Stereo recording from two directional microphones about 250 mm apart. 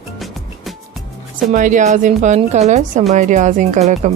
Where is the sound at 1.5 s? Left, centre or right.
Right.